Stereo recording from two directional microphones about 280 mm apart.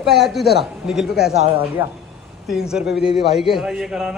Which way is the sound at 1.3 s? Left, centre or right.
Right.